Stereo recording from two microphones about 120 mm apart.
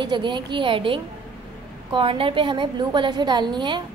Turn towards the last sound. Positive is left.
turn(degrees=-40)  # may be behind; listen again after turning